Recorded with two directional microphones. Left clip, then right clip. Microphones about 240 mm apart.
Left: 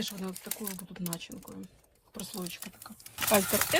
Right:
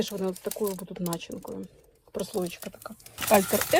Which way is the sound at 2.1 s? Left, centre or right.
Right.